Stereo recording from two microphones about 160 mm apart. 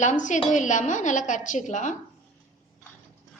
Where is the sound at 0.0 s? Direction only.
50° left (ahead or behind).